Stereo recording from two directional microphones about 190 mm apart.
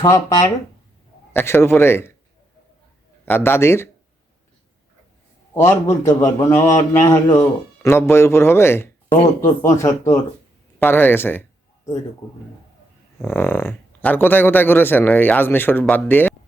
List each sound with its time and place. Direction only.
0.0 s a man's voice: 15° left (ahead or behind)
3.2 s a man's voice: 10° left (ahead or behind)
5.5 s a man's voice: 15° left (ahead or behind)
13.2 s a man's voice: 10° left (ahead or behind)